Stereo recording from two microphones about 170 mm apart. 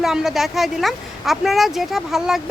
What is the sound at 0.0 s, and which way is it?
Speech, 5° right (ahead or behind).